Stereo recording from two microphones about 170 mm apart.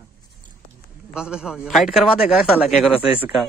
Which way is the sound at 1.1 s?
5° right (ahead or behind).